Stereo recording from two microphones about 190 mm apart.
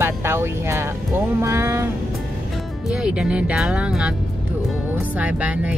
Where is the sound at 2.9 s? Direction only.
5° right (ahead or behind).